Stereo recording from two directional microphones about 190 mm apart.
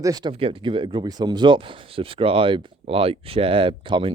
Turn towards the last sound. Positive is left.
turn(degrees=-25)  # may be behind; listen again after turning